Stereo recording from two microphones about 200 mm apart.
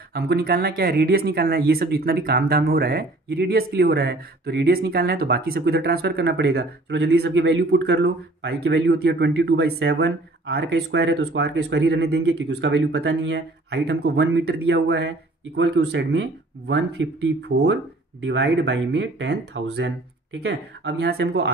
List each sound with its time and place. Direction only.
0.1 s speech: 50° right (ahead or behind)